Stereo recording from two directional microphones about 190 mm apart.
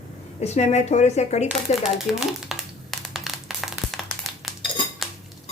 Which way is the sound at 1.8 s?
Centre (ahead or behind).